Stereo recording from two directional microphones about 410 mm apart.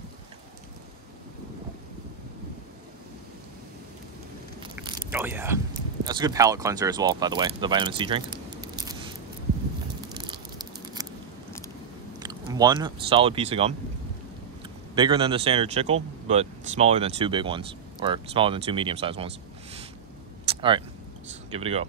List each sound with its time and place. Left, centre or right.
4.7 s biting: centre
6.0 s speech: centre
10.1 s a sound: centre
12.2 s speech: centre
15.0 s speech: centre
20.4 s a sound: centre
21.5 s speech: centre